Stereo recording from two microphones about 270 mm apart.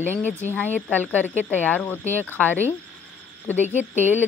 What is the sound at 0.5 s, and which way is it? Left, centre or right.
Speech, centre.